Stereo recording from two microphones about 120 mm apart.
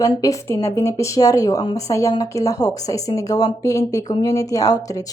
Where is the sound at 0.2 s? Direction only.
25° left (ahead or behind).